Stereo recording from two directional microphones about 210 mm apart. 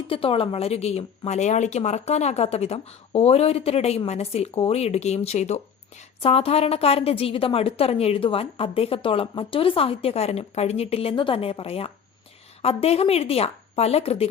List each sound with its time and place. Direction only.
0.1 s a woman's voice: 25° left (ahead or behind)